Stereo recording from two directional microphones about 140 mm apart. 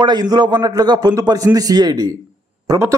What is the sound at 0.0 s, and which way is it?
A man's voice, 30° right (ahead or behind).